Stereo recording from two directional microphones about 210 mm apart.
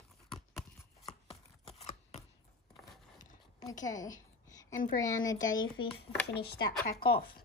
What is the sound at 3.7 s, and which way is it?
Speech, 35° left (ahead or behind).